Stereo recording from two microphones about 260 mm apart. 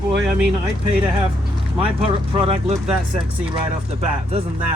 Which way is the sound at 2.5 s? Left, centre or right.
Right.